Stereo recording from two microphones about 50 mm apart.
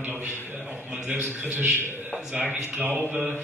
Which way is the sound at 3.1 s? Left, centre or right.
Right.